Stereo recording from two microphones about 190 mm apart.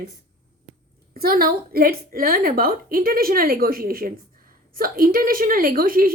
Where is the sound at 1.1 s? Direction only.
50° right (ahead or behind).